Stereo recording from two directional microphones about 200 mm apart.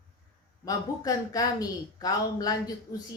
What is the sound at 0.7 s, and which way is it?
Speech, 20° left (ahead or behind).